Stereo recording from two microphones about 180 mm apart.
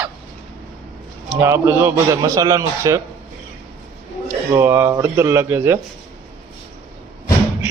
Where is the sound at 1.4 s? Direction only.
10° right (ahead or behind).